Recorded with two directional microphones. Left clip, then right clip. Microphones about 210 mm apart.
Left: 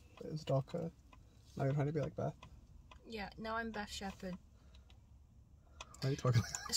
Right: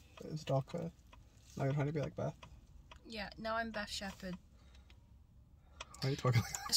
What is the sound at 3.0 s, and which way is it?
Speech, 20° left (ahead or behind).